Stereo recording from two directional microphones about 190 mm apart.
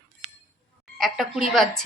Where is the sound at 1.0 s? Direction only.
Centre (ahead or behind).